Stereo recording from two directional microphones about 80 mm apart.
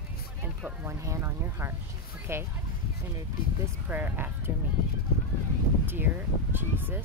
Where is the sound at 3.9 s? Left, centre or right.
Right.